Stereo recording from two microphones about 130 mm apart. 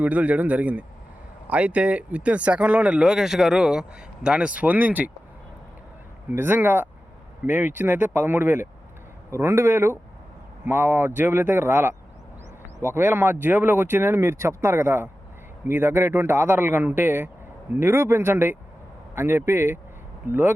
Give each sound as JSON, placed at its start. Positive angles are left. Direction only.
{"t": 0.0, "sound": "speech", "side_deg": -10}
{"t": 6.3, "sound": "speech", "side_deg": -15}